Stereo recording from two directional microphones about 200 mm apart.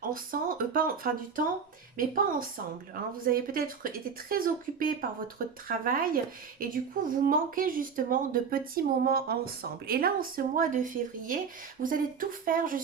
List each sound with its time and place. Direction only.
0.0 s speech: 45° right (ahead or behind)